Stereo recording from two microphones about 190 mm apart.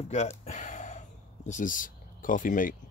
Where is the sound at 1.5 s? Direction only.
45° left (ahead or behind).